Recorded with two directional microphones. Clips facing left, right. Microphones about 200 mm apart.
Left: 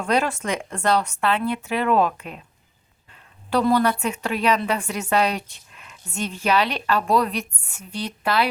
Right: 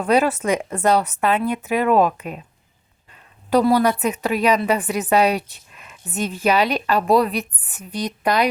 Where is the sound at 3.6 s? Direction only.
10° right (ahead or behind).